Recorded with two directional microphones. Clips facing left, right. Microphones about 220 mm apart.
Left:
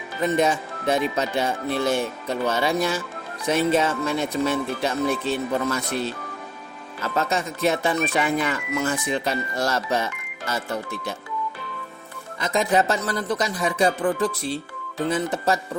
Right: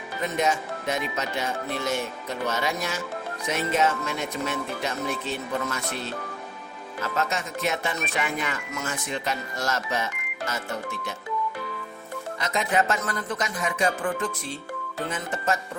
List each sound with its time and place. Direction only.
0.3 s speech: 30° left (ahead or behind)
7.2 s speech: 35° left (ahead or behind)
12.4 s speech: 35° left (ahead or behind)